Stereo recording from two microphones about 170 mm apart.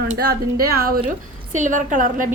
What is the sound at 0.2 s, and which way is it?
Speech, 65° right (ahead or behind).